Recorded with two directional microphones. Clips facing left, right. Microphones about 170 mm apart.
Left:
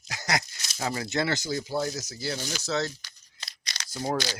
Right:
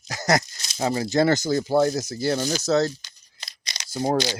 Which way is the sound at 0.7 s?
30° right (ahead or behind).